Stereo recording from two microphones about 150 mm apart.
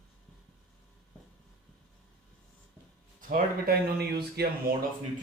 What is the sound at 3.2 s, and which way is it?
Speech, 70° right (ahead or behind).